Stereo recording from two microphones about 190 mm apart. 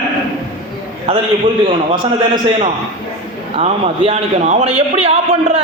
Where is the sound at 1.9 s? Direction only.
25° right (ahead or behind).